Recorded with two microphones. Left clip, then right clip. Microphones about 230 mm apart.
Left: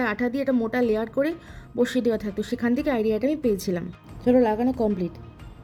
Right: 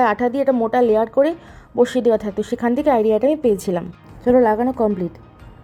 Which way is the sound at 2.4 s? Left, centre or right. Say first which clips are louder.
Right 6 dB; centre.